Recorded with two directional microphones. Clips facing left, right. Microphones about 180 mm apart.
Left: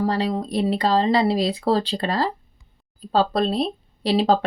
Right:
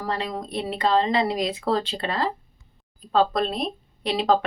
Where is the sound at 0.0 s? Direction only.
35° left (ahead or behind).